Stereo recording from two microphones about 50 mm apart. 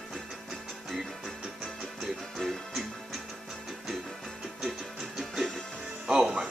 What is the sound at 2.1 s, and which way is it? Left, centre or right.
Music, centre.